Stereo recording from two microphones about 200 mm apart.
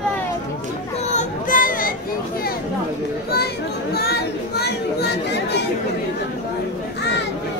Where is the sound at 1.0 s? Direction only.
35° left (ahead or behind).